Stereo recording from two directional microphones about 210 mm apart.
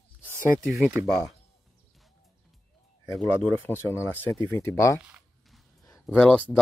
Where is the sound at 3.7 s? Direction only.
10° left (ahead or behind).